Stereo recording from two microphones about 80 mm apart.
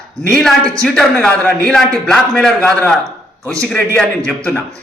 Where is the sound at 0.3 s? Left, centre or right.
Centre.